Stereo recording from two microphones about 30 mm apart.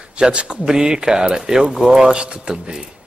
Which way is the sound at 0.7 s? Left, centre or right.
Right.